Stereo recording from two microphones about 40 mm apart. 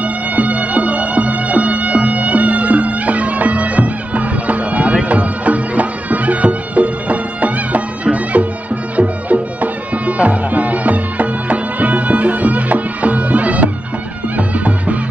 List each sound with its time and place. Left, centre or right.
0.0 s music: right